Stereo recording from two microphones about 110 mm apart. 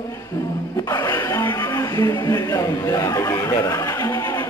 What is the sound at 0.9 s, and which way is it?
Speech, 25° left (ahead or behind).